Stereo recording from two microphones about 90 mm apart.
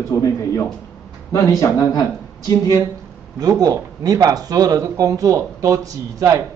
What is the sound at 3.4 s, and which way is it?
Speech, 45° right (ahead or behind).